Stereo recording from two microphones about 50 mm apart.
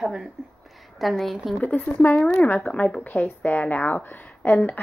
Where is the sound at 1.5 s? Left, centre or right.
Left.